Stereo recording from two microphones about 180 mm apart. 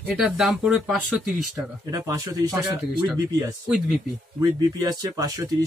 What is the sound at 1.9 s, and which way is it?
Speech, 20° right (ahead or behind).